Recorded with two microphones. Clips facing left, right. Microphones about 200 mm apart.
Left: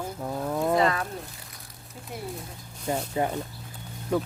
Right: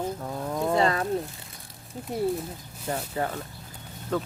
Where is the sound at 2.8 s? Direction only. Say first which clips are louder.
Left 2 dB; 15° left (ahead or behind).